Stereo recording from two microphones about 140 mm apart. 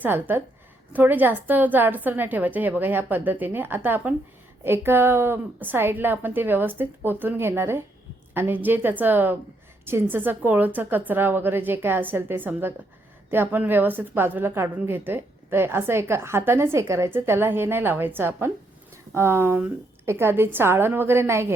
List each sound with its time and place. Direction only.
0.0 s a woman's voice: 15° right (ahead or behind)